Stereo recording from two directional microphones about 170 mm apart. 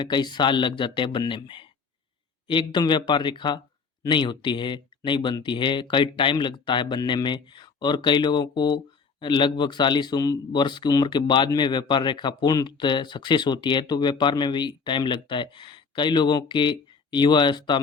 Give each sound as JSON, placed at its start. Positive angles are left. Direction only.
{"t": 0.0, "sound": "speech", "side_deg": 25}